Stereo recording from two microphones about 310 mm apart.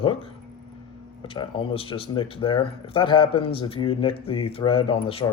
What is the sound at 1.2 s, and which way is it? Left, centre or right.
Speech, centre.